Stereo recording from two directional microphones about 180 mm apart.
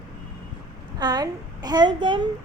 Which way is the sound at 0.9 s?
20° right (ahead or behind).